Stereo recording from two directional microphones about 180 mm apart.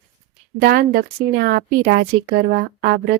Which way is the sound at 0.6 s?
60° right (ahead or behind).